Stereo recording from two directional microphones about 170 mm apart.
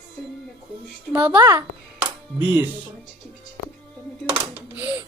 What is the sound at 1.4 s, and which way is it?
Speech, 20° right (ahead or behind).